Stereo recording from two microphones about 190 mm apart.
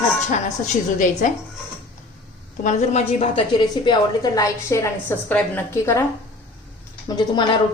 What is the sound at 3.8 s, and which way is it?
A woman's voice, 20° left (ahead or behind).